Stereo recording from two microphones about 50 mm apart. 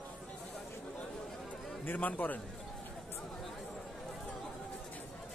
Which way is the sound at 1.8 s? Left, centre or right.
Left.